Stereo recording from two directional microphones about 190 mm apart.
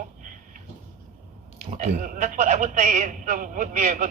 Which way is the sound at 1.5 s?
40° right (ahead or behind).